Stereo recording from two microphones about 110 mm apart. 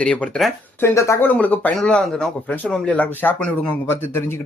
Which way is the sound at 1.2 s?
15° left (ahead or behind).